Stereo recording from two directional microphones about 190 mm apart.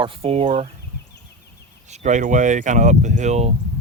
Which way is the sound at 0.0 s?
30° right (ahead or behind).